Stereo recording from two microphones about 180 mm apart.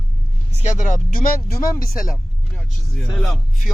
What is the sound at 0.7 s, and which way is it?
Speech, 45° left (ahead or behind).